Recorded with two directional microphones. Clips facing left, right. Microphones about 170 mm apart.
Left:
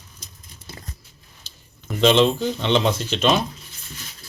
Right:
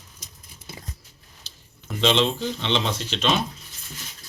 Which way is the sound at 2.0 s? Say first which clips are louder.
Left 5 dB; 50° left (ahead or behind).